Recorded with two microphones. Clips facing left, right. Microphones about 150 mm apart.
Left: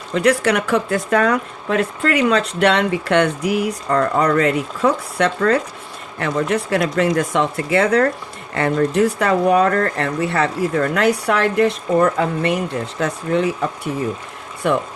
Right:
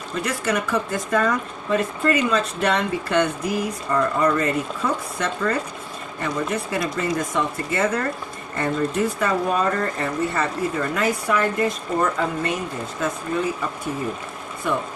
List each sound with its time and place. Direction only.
0.1 s speech: 75° left (ahead or behind)